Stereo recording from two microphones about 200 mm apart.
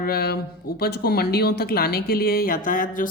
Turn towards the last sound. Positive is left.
turn(degrees=40)  # may be behind; listen again after turning